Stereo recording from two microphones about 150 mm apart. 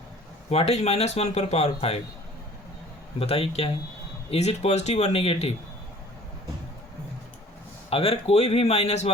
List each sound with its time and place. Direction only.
0.5 s speech: 45° left (ahead or behind)
3.2 s speech: 40° left (ahead or behind)
7.9 s speech: 40° left (ahead or behind)